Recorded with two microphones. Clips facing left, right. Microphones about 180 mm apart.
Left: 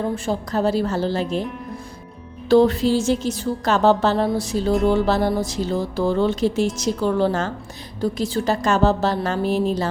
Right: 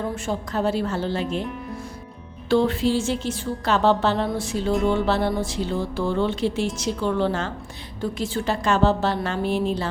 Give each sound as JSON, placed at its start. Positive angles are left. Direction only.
{"t": 0.3, "sound": "speech", "side_deg": 35}
{"t": 2.5, "sound": "speech", "side_deg": 40}